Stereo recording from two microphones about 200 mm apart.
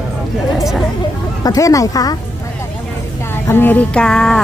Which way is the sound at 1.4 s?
15° left (ahead or behind).